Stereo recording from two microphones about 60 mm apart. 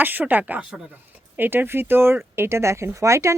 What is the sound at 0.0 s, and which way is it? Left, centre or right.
Speech, right.